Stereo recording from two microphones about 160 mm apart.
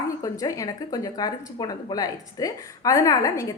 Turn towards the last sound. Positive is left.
turn(degrees=20)  # may be behind; listen again after turning